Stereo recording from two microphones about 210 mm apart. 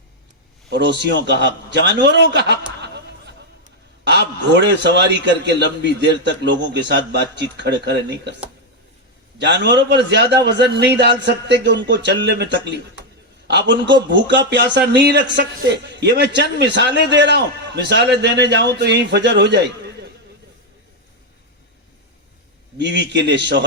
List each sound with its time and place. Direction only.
0.7 s a man's voice: 55° right (ahead or behind)
2.8 s a sound: 55° right (ahead or behind)
4.0 s a man's voice: 55° right (ahead or behind)
9.4 s a man's voice: 55° right (ahead or behind)
22.8 s a man's voice: 55° right (ahead or behind)